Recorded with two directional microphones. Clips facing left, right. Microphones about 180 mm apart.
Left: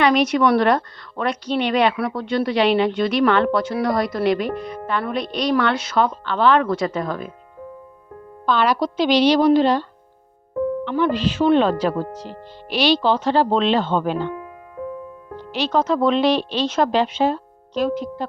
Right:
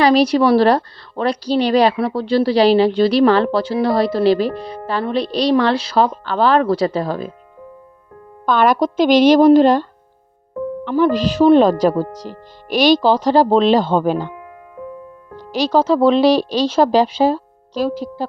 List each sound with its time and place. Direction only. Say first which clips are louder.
0.0 s a woman's voice: right 4 dB; 35° right (ahead or behind)
8.4 s a woman's voice: right 4 dB; 50° right (ahead or behind)
10.8 s a woman's voice: right 9 dB; 40° right (ahead or behind)
15.4 s a woman's voice: right 5 dB; 35° right (ahead or behind)